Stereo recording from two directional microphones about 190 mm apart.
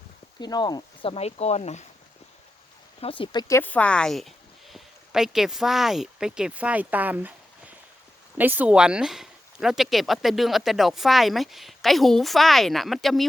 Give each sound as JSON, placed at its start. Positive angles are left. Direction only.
{"t": 0.3, "sound": "speech", "side_deg": 20}
{"t": 3.0, "sound": "speech", "side_deg": 25}
{"t": 8.4, "sound": "speech", "side_deg": -10}